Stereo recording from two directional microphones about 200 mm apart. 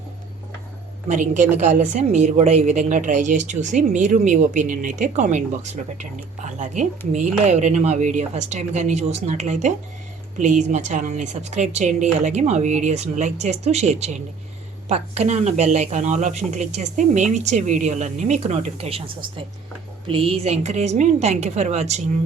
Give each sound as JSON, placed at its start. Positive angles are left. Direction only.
{"t": 1.0, "sound": "a woman's voice", "side_deg": -40}